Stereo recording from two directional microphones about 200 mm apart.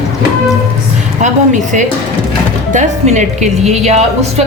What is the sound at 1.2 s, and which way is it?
A woman's voice, 40° right (ahead or behind).